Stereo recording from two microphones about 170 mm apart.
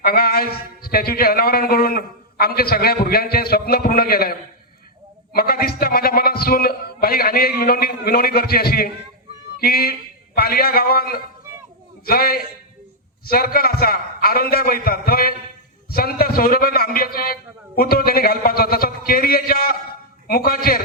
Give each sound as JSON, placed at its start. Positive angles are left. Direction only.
{"t": 0.0, "sound": "a man's voice", "side_deg": 65}